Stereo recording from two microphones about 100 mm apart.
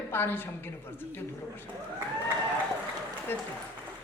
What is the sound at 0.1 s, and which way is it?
A man's voice, 20° left (ahead or behind).